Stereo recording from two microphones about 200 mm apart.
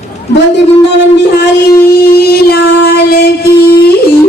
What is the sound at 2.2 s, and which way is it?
Music, 50° left (ahead or behind).